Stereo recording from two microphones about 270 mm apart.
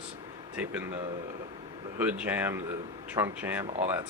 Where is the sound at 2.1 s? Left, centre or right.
Centre.